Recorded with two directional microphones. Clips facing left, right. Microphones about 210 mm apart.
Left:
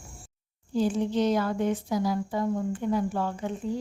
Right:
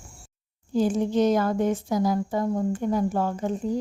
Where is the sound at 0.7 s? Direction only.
45° right (ahead or behind).